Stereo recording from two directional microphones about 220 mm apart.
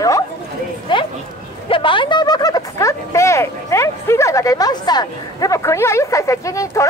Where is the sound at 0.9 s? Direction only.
20° left (ahead or behind).